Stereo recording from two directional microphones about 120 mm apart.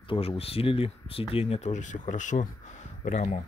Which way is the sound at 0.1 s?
50° left (ahead or behind).